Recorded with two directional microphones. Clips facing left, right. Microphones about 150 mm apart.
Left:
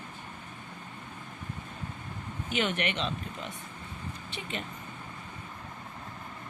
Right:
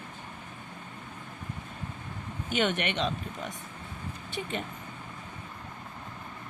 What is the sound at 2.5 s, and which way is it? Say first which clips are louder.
Speech: right 2 dB; 45° right (ahead or behind).